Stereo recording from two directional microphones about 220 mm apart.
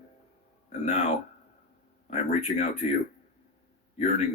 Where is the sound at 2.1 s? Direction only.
30° left (ahead or behind).